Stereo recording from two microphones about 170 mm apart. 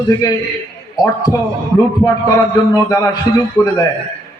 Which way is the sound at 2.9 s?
20° left (ahead or behind).